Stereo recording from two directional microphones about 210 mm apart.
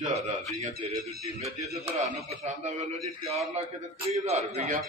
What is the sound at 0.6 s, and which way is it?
A man's voice, 30° right (ahead or behind).